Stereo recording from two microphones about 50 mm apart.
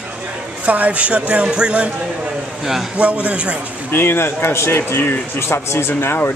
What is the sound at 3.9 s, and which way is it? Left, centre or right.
A man's voice, left.